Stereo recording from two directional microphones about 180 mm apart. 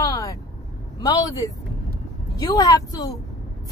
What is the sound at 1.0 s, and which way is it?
Speech, 20° left (ahead or behind).